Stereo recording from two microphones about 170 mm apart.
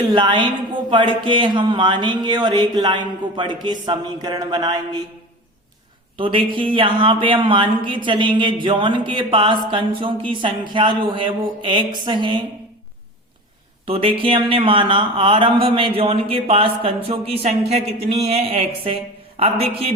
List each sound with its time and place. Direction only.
0.0 s a man's voice: 25° right (ahead or behind)
6.1 s a man's voice: 30° right (ahead or behind)
13.8 s speech: 35° right (ahead or behind)